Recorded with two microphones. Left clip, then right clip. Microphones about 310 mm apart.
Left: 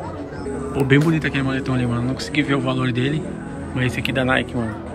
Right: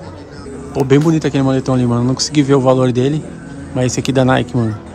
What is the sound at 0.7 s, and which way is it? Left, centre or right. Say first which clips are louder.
Speech: right 6 dB; centre.